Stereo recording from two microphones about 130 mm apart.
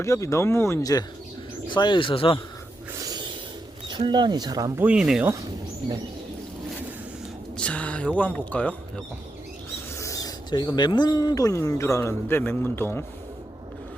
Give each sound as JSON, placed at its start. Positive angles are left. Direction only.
{"t": 0.0, "sound": "speech", "side_deg": 20}
{"t": 2.9, "sound": "a sound", "side_deg": -30}
{"t": 3.8, "sound": "speech", "side_deg": -35}
{"t": 4.8, "sound": "speech", "side_deg": -10}
{"t": 7.5, "sound": "speech", "side_deg": 10}
{"t": 10.0, "sound": "speech", "side_deg": 25}